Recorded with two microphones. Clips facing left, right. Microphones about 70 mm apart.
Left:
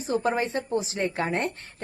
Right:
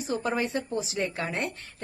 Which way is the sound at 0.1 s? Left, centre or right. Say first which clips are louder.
Left 3 dB; left.